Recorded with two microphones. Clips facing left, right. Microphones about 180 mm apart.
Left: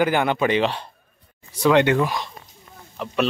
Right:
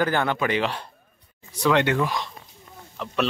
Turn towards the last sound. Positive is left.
turn(degrees=5)  # may be behind; listen again after turning